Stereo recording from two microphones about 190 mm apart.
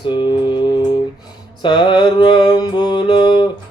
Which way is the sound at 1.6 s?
25° left (ahead or behind).